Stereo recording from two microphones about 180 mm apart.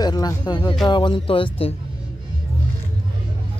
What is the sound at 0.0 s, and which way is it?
Speech, 20° left (ahead or behind).